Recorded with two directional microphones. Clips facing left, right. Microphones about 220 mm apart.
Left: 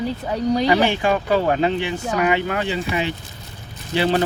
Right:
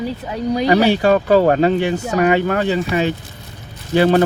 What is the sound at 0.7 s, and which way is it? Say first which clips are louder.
Speech: right 9 dB; 40° right (ahead or behind).